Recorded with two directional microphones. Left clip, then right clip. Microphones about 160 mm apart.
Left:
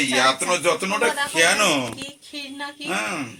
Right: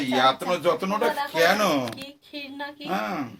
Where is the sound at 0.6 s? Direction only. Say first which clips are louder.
Left 3 dB; 10° left (ahead or behind).